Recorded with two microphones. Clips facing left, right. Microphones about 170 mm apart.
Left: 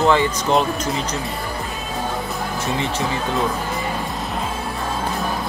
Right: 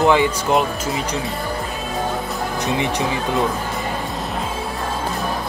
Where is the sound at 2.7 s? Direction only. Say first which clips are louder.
Right 2 dB; 15° right (ahead or behind).